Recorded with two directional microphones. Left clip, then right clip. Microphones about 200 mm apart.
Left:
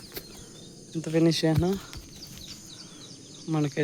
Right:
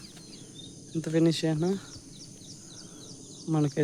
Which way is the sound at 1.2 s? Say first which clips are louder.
Left 3 dB; 15° left (ahead or behind).